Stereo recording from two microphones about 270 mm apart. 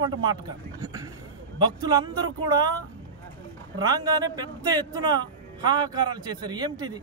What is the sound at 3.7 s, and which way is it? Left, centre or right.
A man's voice, centre.